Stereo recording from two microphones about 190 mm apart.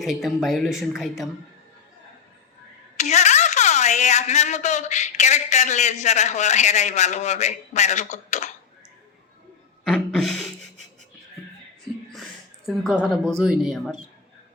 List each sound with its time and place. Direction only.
0.0 s a woman's voice: centre (ahead or behind)
3.0 s a woman's voice: 40° left (ahead or behind)
9.8 s a sound: centre (ahead or behind)
12.6 s a woman's voice: centre (ahead or behind)